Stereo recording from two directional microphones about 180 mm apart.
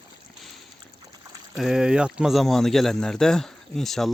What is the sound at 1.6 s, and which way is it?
Speech, 5° right (ahead or behind).